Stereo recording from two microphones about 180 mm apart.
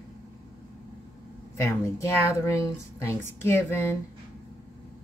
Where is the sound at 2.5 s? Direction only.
15° left (ahead or behind).